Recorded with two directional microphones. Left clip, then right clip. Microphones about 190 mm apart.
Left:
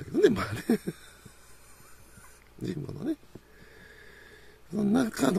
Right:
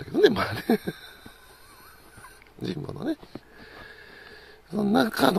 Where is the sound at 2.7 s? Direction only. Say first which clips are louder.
Right 3 dB; 15° left (ahead or behind).